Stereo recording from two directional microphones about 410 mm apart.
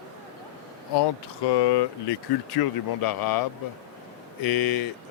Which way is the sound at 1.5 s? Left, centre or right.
Left.